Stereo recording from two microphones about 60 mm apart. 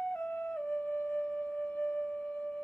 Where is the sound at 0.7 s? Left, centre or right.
Left.